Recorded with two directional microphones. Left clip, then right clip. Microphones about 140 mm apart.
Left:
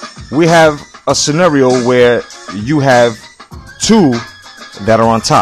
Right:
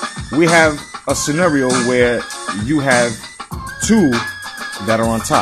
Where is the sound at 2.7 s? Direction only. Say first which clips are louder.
Left 6 dB; 65° left (ahead or behind).